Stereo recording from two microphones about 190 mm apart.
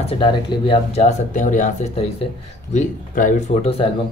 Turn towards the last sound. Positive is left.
turn(degrees=30)  # may be behind; listen again after turning